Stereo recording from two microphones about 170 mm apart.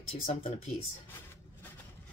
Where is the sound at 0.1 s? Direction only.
40° left (ahead or behind).